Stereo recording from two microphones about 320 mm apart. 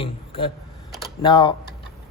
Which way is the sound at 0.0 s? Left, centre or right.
Centre.